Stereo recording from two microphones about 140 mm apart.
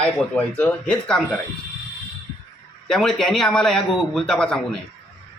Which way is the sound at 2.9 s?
5° left (ahead or behind).